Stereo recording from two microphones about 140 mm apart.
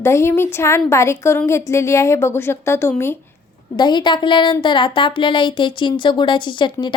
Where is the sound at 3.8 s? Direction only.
30° left (ahead or behind).